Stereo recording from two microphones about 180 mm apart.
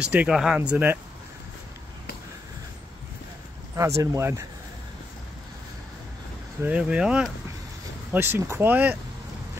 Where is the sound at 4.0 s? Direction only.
15° right (ahead or behind).